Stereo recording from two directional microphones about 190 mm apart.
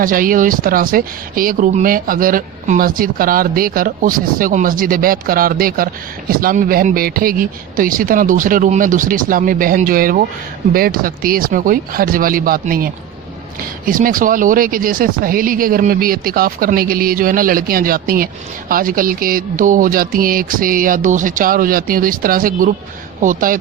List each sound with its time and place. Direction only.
0.0 s speech: 45° right (ahead or behind)